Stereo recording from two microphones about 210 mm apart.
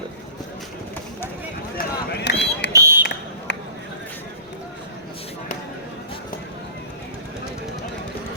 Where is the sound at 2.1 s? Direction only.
55° left (ahead or behind).